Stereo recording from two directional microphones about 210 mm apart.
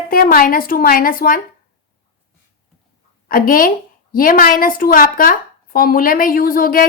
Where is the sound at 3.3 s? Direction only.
45° left (ahead or behind).